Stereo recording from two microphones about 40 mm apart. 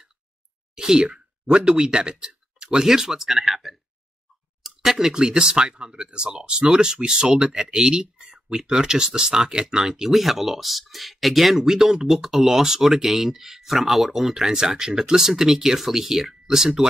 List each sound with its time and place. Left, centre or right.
0.7 s speech: centre